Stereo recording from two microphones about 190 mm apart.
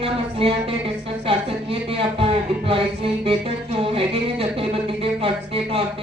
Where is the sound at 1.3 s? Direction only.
30° right (ahead or behind).